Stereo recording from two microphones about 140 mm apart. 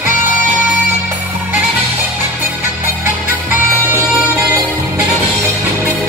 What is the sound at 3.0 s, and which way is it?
Music, 15° right (ahead or behind).